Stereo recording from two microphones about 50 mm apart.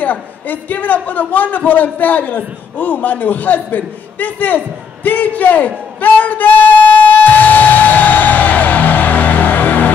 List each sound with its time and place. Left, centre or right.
0.0 s a man's voice: left
5.9 s music: left